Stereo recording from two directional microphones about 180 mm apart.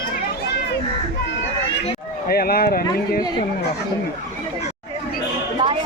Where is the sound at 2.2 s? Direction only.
60° left (ahead or behind).